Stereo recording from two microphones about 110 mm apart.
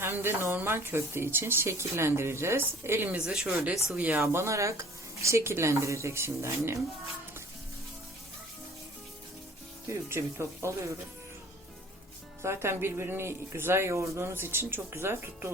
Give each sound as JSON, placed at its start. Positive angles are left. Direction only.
{"t": 0.0, "sound": "speech", "side_deg": -20}
{"t": 3.2, "sound": "speech", "side_deg": -10}
{"t": 9.8, "sound": "speech", "side_deg": -25}
{"t": 12.4, "sound": "speech", "side_deg": -25}